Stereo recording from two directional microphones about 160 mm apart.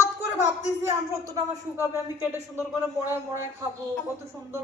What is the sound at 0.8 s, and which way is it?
Speech, 20° right (ahead or behind).